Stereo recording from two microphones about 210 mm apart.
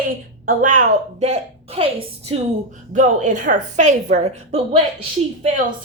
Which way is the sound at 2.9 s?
35° right (ahead or behind).